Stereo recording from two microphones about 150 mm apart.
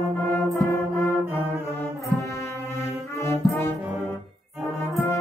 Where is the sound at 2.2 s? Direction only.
20° left (ahead or behind).